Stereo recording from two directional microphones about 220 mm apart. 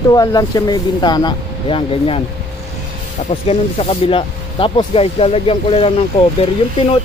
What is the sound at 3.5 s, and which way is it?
Speech, 25° left (ahead or behind).